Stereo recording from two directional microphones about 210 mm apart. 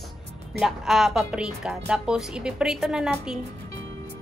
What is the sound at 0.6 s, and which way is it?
A woman's voice, centre (ahead or behind).